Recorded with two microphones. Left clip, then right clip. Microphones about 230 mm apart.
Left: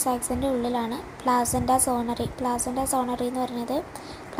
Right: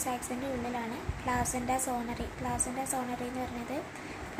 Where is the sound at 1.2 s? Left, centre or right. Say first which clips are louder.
Left 9 dB; left.